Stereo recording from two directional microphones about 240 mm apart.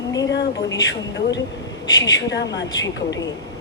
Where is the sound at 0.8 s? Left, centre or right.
Left.